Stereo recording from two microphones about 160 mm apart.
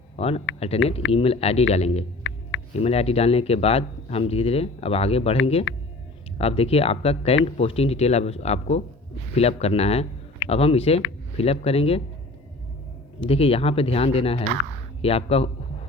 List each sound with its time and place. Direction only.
0.2 s speech: 40° left (ahead or behind)
6.4 s speech: 35° left (ahead or behind)
13.1 s speech: 35° left (ahead or behind)